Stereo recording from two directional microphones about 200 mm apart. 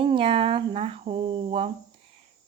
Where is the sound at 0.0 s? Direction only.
25° right (ahead or behind).